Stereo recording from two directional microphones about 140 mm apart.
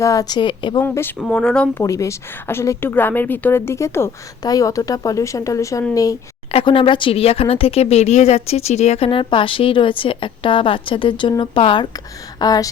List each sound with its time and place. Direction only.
0.0 s a woman's voice: 25° left (ahead or behind)
0.8 s speech: 15° left (ahead or behind)
1.8 s a woman's voice: 20° left (ahead or behind)
6.5 s speech: 40° left (ahead or behind)
9.0 s a woman's voice: 40° left (ahead or behind)